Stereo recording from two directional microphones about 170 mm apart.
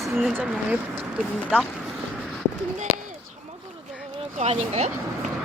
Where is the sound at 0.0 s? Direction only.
Centre (ahead or behind).